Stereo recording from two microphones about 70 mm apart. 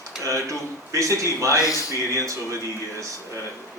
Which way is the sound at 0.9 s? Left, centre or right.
Right.